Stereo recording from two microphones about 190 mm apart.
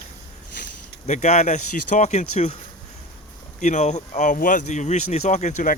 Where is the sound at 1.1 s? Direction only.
35° left (ahead or behind).